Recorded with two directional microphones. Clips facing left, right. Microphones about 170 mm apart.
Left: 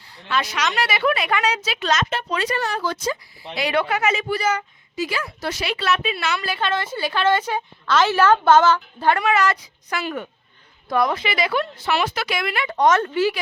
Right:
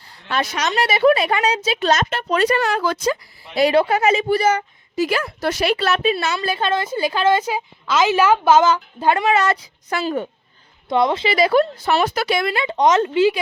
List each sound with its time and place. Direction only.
0.3 s speech: 45° right (ahead or behind)
0.7 s speech: 25° right (ahead or behind)
2.3 s speech: 50° right (ahead or behind)
2.7 s speech: 90° right
3.5 s a woman's voice: 35° right (ahead or behind)
4.9 s speech: 45° right (ahead or behind)
6.2 s a woman's voice: 20° right (ahead or behind)
9.2 s a woman's voice: 25° right (ahead or behind); by 12.2 s 45° right (ahead or behind)
12.2 s speech: 30° right (ahead or behind)